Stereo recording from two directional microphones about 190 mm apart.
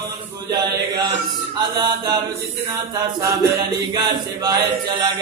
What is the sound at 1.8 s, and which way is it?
Mantra, 20° right (ahead or behind).